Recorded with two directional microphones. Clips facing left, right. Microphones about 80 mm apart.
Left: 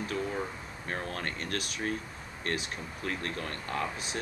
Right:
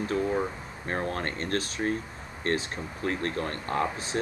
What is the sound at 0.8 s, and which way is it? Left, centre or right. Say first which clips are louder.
Speech: right 5 dB; right.